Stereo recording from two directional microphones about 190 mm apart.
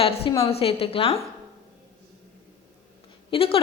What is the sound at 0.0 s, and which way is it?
A woman's voice, 30° left (ahead or behind).